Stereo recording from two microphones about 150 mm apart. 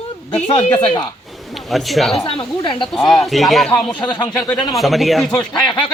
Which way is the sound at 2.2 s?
35° left (ahead or behind).